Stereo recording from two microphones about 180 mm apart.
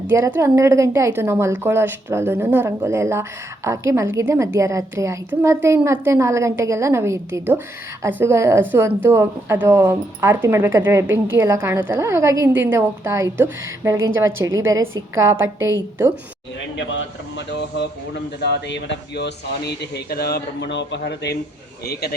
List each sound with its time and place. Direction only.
0.1 s a woman's voice: 15° right (ahead or behind)
16.7 s speech: 90° left; by 21.3 s 70° left (ahead or behind)